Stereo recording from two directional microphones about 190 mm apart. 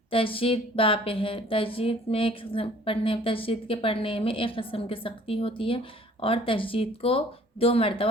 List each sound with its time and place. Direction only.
0.1 s speech: 30° left (ahead or behind)